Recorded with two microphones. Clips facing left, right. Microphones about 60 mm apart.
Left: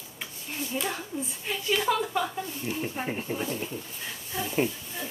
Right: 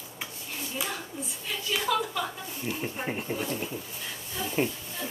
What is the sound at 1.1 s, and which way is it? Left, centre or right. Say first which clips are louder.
Speech: left 3 dB; left.